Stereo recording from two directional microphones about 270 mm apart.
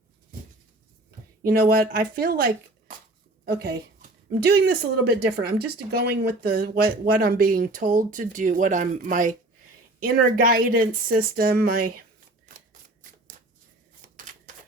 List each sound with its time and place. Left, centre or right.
1.5 s speech: right